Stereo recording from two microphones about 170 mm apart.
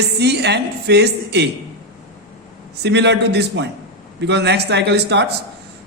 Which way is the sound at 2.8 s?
90° right.